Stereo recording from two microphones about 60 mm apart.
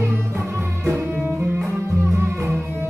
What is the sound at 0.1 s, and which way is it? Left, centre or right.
Music, right.